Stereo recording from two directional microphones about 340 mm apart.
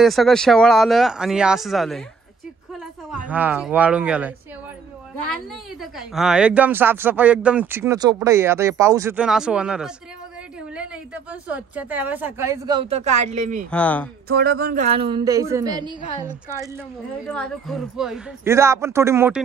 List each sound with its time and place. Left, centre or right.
0.0 s a woman's voice: centre
3.1 s a woman's voice: centre
5.3 s a woman's voice: centre
11.4 s a woman's voice: centre; by 13.7 s right
13.7 s a woman's voice: centre
14.3 s a woman's voice: right; by 16.3 s centre
17.3 s a woman's voice: centre